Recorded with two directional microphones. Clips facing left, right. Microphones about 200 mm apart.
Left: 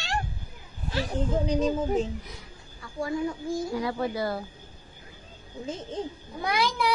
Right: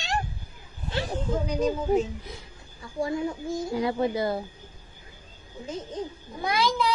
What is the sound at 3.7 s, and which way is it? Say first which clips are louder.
Speech: right 3 dB; 20° right (ahead or behind).